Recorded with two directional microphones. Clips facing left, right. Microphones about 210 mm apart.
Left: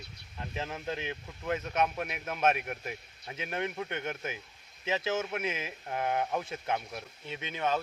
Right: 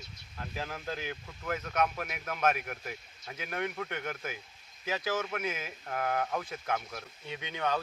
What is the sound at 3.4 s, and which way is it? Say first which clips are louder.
Speech: left 1 dB; 25° left (ahead or behind).